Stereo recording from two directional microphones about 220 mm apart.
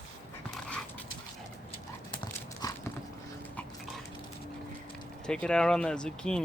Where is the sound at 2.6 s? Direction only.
15° left (ahead or behind).